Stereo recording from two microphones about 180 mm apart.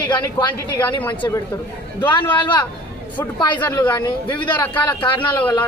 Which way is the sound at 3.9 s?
25° left (ahead or behind).